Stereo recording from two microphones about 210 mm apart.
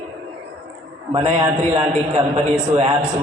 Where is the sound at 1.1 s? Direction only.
30° right (ahead or behind).